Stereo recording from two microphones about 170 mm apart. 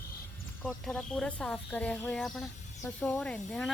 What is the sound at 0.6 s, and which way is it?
Speech, 5° left (ahead or behind).